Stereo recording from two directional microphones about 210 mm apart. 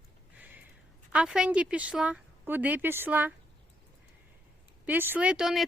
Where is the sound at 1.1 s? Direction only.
5° right (ahead or behind).